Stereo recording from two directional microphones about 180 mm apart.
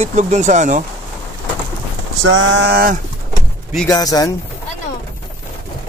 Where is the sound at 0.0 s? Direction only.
40° right (ahead or behind).